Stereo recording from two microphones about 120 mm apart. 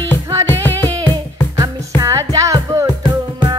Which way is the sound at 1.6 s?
30° right (ahead or behind).